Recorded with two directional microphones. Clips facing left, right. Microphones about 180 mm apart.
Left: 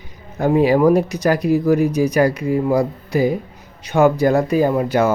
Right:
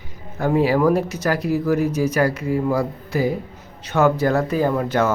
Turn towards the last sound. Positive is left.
turn(degrees=10)  # may be behind; listen again after turning